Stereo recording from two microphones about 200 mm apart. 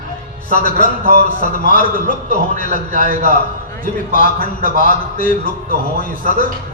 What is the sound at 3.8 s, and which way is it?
A man's voice, 45° left (ahead or behind).